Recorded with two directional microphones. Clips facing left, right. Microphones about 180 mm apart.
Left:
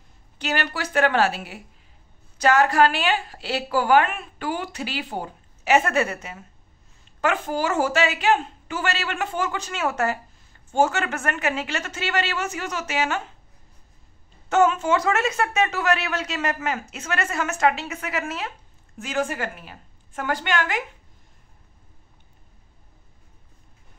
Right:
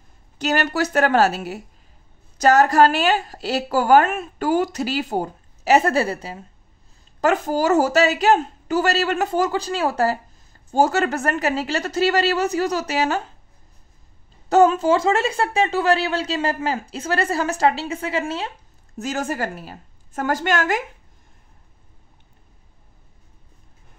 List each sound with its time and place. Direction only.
0.4 s a woman's voice: 40° right (ahead or behind)
14.5 s a woman's voice: 35° right (ahead or behind)
18.9 s a woman's voice: 40° right (ahead or behind)